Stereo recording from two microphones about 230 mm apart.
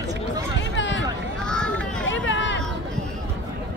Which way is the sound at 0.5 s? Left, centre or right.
Left.